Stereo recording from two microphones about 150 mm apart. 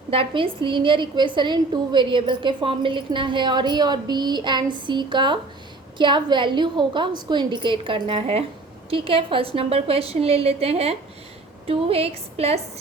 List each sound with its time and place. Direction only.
0.1 s a woman's voice: 35° right (ahead or behind)